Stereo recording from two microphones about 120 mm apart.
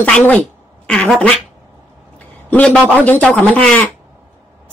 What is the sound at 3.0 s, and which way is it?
Speech, 10° left (ahead or behind).